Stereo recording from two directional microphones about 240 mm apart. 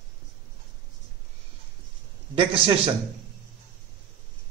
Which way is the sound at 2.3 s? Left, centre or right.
Right.